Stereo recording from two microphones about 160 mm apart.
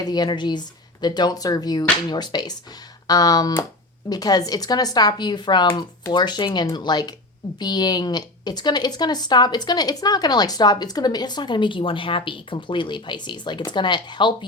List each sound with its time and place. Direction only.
0.0 s a woman's voice: 25° left (ahead or behind)